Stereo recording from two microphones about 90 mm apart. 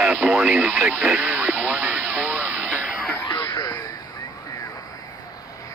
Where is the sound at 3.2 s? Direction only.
50° left (ahead or behind).